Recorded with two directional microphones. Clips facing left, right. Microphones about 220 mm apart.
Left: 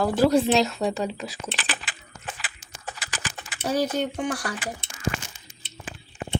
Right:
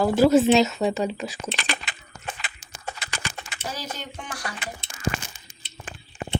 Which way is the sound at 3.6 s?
55° left (ahead or behind).